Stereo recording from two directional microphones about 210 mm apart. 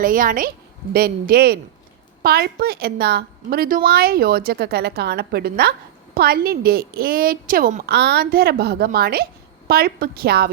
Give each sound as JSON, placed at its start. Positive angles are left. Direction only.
{"t": 0.0, "sound": "a woman's voice", "side_deg": -40}